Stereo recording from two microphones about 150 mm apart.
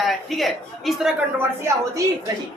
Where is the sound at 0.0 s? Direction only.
Centre (ahead or behind).